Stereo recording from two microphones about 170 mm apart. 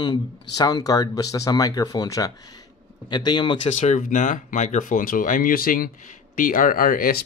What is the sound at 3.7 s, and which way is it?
Speech, 45° left (ahead or behind).